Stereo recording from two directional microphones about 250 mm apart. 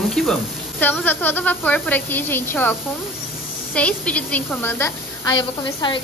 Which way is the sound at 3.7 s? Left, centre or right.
Centre.